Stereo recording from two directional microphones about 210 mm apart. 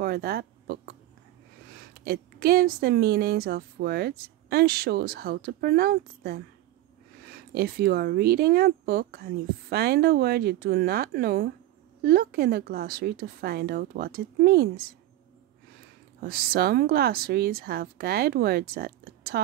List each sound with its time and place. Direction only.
0.0 s a sound: 45° right (ahead or behind)
1.8 s speech: 45° right (ahead or behind)
16.2 s speech: 45° right (ahead or behind)